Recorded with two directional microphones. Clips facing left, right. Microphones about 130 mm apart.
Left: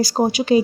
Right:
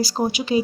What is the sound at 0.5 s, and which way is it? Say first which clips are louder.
Speech: left 5 dB; 90° left.